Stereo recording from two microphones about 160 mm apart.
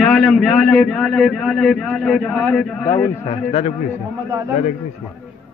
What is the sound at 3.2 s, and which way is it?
Speech, 40° left (ahead or behind).